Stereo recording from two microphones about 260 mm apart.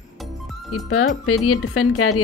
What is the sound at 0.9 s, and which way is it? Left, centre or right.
Speech, left.